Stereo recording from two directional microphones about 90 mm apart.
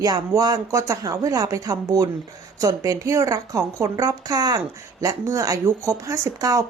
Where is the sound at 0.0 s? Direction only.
45° right (ahead or behind).